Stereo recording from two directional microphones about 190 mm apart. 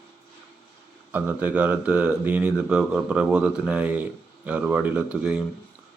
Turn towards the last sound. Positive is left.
turn(degrees=-5)  # may be behind; listen again after turning